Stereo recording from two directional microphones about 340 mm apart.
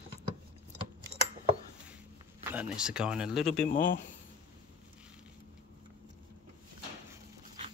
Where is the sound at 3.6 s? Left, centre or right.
Left.